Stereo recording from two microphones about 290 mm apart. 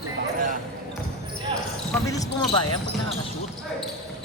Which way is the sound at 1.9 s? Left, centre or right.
Centre.